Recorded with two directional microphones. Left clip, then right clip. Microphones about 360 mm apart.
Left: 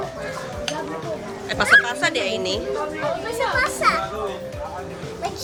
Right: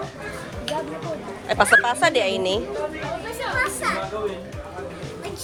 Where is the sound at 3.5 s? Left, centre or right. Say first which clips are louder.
Left 4 dB; centre.